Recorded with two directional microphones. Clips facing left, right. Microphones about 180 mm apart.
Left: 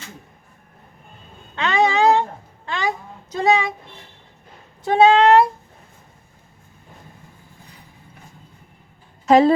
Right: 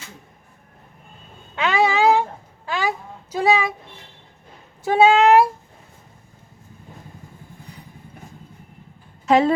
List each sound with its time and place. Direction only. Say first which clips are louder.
1.5 s a sound: left 1 dB; 5° right (ahead or behind)
3.3 s speech: even; 5° right (ahead or behind)
4.8 s speech: left 1 dB; 10° right (ahead or behind)
9.2 s a woman's voice: left 3 dB; 40° left (ahead or behind)